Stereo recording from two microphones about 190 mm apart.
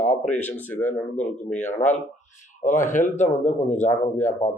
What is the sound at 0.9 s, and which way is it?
A man's voice, 40° left (ahead or behind).